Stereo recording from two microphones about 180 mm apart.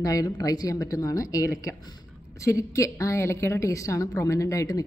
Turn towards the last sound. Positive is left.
turn(degrees=20)  # may be behind; listen again after turning